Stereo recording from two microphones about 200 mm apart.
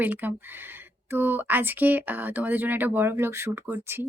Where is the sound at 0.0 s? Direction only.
10° right (ahead or behind).